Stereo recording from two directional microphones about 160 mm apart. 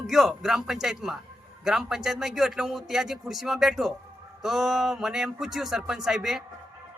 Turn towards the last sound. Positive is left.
turn(degrees=0)  # may be behind; listen again after turning